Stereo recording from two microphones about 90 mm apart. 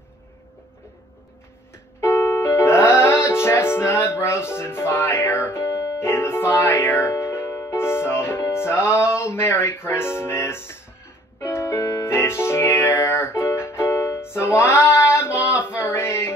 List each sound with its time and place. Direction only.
2.0 s music: 30° left (ahead or behind)